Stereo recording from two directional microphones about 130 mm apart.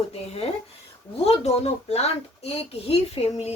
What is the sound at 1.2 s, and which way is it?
A woman's voice, 55° left (ahead or behind).